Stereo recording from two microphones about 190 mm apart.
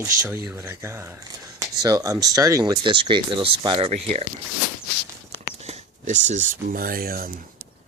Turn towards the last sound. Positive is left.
turn(degrees=-50)  # may be behind; listen again after turning